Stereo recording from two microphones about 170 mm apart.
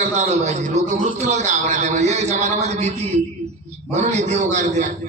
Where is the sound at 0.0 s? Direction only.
40° right (ahead or behind).